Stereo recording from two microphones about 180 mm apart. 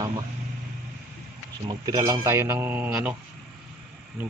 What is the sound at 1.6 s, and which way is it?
A man's voice, 20° right (ahead or behind).